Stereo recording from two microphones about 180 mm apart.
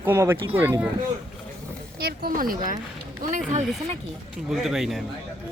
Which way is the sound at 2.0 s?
55° right (ahead or behind).